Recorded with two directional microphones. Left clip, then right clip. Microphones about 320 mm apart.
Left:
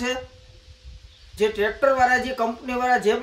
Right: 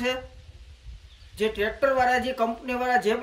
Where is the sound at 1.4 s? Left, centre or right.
Centre.